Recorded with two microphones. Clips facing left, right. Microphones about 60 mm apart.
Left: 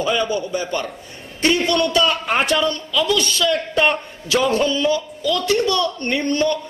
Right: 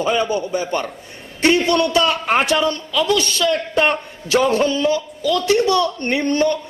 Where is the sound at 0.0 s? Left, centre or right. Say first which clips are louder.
Right 1 dB; right.